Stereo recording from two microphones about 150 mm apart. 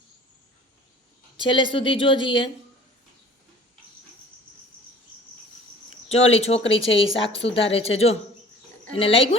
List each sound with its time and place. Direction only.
1.5 s speech: 35° left (ahead or behind)
6.1 s speech: 40° left (ahead or behind)